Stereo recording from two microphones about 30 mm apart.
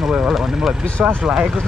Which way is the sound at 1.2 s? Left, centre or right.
Centre.